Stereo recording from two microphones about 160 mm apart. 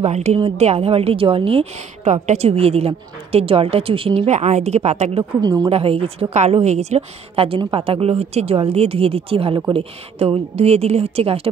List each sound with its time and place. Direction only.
0.0 s a woman's voice: 45° right (ahead or behind)
5.4 s a woman's voice: 25° right (ahead or behind)
5.7 s a woman's voice: 35° right (ahead or behind)